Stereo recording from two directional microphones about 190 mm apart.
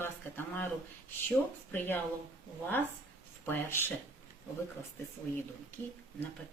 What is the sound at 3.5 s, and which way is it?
Speech, 10° left (ahead or behind).